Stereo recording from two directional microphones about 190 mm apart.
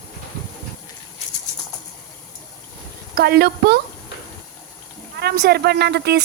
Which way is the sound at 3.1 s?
55° right (ahead or behind).